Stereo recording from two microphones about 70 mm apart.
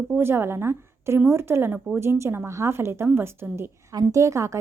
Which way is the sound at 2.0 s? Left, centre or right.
Right.